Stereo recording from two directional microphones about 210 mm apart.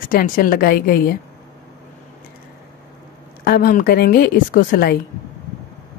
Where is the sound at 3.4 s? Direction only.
45° left (ahead or behind).